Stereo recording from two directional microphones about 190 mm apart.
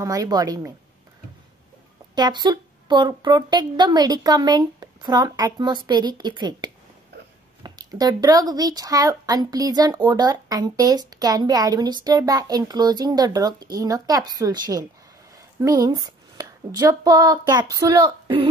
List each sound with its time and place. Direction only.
0.0 s a woman's voice: 20° right (ahead or behind)
2.1 s a woman's voice: 20° right (ahead or behind)